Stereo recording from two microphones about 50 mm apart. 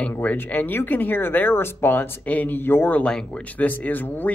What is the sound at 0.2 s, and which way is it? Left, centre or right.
Speech, left.